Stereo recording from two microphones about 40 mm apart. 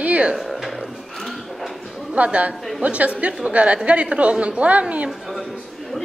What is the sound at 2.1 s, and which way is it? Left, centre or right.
A woman's voice, right.